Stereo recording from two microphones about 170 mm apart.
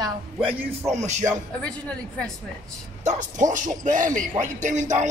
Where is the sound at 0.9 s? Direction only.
45° right (ahead or behind).